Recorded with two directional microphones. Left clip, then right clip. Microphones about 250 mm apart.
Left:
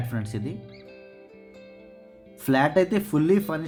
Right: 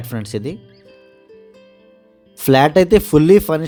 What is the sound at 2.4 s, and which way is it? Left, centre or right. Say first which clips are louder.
Speech: right 9 dB; right.